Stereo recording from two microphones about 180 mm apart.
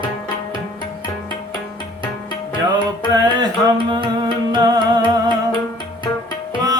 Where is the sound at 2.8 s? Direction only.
25° right (ahead or behind).